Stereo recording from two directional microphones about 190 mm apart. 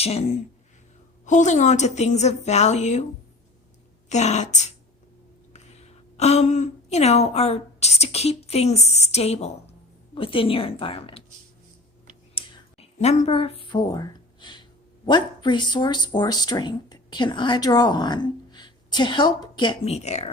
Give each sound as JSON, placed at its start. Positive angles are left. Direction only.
{"t": 0.0, "sound": "a woman's voice", "side_deg": 30}
{"t": 4.1, "sound": "a woman's voice", "side_deg": 35}
{"t": 12.3, "sound": "a sound", "side_deg": 30}
{"t": 15.0, "sound": "speech", "side_deg": 25}